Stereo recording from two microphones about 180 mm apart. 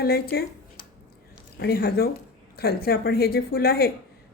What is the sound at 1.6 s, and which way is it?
Speech, 60° left (ahead or behind).